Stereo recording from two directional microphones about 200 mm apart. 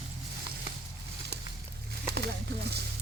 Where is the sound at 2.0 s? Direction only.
55° right (ahead or behind).